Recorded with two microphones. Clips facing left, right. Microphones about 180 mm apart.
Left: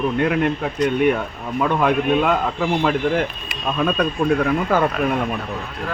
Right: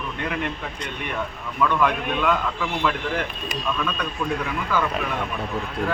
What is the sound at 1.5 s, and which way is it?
Speech, 50° left (ahead or behind).